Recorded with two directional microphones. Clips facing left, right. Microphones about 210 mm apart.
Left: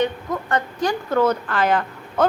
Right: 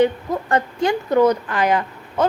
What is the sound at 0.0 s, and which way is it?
A woman's voice, 30° right (ahead or behind).